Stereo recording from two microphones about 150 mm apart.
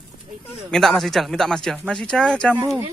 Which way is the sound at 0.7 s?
5° left (ahead or behind).